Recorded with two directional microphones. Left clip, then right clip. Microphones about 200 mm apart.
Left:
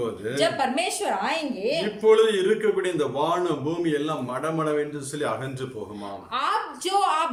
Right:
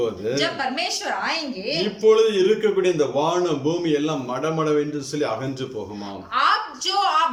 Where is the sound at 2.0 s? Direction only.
5° right (ahead or behind).